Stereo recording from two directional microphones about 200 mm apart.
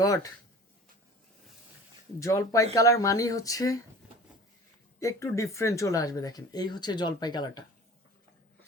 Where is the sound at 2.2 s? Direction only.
15° left (ahead or behind).